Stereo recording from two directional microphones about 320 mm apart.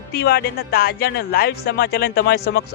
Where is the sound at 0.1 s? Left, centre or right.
Left.